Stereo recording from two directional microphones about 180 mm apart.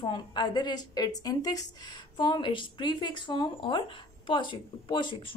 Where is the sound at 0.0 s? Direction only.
25° left (ahead or behind).